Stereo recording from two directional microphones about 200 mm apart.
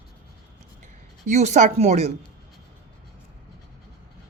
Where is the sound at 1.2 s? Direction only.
35° right (ahead or behind).